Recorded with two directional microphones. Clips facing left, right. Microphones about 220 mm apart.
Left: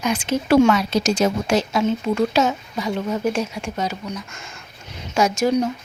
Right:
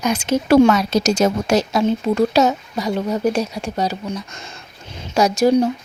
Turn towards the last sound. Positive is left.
turn(degrees=-35)  # may be behind; listen again after turning